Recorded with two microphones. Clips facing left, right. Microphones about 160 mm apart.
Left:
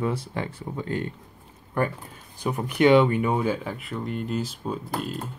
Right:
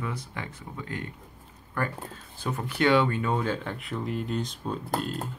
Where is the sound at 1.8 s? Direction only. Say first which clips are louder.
Left 5 dB; 20° left (ahead or behind).